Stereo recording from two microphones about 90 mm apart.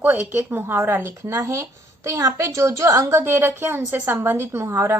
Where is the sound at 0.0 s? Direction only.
20° right (ahead or behind).